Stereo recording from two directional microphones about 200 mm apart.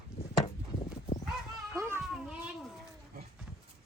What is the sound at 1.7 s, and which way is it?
Cat, 15° right (ahead or behind).